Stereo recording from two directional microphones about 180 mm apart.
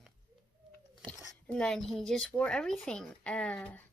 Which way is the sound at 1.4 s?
5° left (ahead or behind).